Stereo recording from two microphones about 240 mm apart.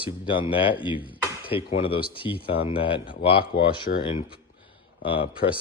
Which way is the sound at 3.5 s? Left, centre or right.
Left.